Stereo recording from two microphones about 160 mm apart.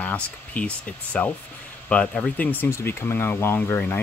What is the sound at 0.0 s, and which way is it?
Speech, 10° left (ahead or behind).